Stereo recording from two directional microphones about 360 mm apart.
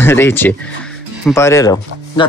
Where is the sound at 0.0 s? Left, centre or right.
Centre.